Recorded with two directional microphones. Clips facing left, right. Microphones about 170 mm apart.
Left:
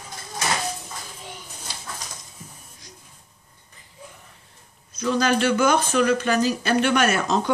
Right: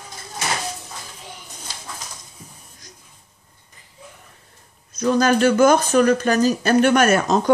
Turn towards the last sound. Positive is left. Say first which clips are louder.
# right 5 dB
turn(degrees=-45)  # may be behind; listen again after turning